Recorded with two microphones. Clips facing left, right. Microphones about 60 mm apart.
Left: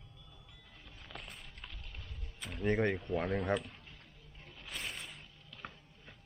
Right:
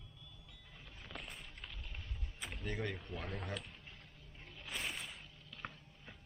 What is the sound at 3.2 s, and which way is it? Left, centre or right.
Speech, left.